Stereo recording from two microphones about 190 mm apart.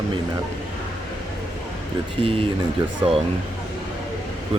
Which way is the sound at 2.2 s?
30° right (ahead or behind).